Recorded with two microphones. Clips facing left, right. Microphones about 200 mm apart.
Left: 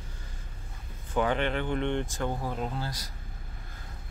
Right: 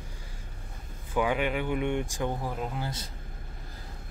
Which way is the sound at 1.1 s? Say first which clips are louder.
Even; 10° right (ahead or behind).